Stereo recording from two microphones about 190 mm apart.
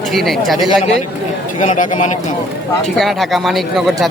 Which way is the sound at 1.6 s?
40° left (ahead or behind).